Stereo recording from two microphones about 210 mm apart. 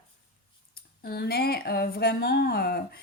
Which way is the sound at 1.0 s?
50° left (ahead or behind).